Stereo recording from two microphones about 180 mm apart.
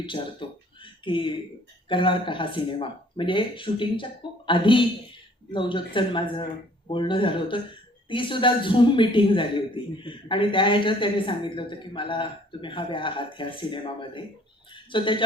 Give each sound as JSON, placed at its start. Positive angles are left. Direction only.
{"t": 0.0, "sound": "a man's voice", "side_deg": 25}